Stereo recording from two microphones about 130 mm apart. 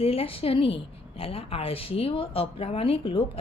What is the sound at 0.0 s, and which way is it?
A woman's voice, 45° left (ahead or behind).